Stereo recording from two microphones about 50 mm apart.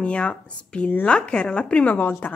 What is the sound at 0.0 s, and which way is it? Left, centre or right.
Speech, left.